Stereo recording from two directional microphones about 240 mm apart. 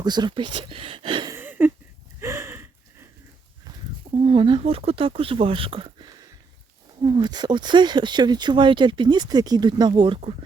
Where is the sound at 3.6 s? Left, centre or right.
Right.